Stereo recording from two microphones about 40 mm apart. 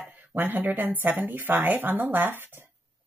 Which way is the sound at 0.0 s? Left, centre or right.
Right.